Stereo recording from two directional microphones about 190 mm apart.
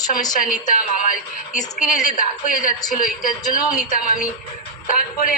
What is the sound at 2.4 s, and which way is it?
Speech, 45° left (ahead or behind).